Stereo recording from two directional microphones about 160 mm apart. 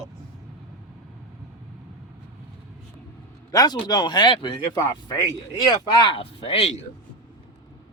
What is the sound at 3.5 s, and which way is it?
Speech, 25° left (ahead or behind).